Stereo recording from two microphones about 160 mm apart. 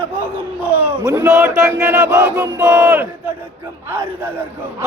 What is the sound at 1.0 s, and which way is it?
A man's voice, 20° right (ahead or behind).